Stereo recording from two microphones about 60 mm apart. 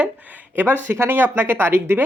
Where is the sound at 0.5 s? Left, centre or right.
Right.